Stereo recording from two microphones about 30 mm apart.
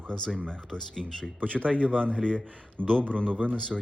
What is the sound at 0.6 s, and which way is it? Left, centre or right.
Speech, centre.